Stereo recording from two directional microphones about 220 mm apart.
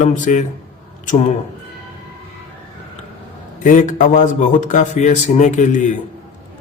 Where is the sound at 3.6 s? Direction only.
35° left (ahead or behind).